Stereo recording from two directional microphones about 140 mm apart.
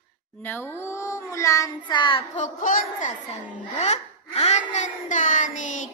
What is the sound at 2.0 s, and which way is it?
Child singing, 35° left (ahead or behind).